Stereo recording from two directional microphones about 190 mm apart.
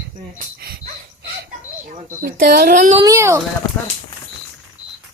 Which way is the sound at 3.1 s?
15° right (ahead or behind).